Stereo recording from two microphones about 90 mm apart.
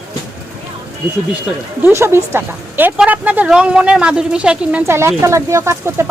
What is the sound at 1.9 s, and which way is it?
A woman's voice, 30° right (ahead or behind).